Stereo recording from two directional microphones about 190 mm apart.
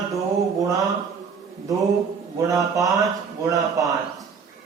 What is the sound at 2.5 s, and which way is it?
A man's voice, 15° right (ahead or behind).